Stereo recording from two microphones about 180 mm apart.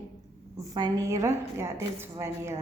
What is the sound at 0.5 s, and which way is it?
A woman's voice, 20° right (ahead or behind).